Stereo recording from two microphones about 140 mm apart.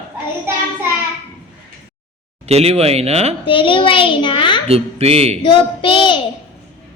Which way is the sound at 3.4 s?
35° left (ahead or behind).